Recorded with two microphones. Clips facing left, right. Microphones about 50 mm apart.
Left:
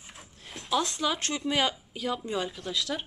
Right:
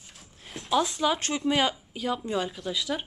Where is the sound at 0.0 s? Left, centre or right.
Centre.